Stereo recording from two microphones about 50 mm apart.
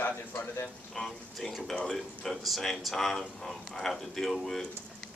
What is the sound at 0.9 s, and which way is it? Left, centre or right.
Speech, centre.